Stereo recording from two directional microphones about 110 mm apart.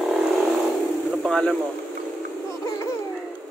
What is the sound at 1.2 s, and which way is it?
Speech, 5° left (ahead or behind).